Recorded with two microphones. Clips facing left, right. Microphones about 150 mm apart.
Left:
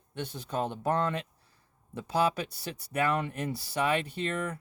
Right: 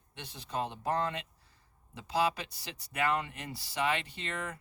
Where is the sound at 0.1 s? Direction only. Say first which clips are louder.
Left 5 dB; 55° left (ahead or behind).